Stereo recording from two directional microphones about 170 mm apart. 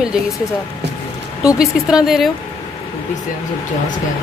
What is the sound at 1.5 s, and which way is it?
Speech, 5° right (ahead or behind).